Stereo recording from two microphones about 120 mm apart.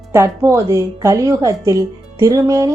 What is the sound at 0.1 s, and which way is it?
A woman's voice, 25° right (ahead or behind).